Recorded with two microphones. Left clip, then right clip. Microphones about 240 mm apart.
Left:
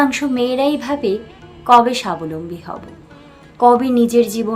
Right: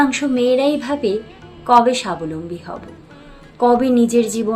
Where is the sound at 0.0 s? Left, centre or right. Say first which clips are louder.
Even; centre.